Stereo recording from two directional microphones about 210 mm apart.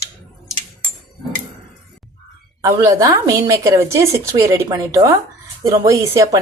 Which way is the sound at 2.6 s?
15° right (ahead or behind).